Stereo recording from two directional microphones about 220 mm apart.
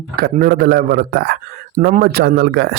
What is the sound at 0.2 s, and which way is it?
A man's voice, 40° right (ahead or behind).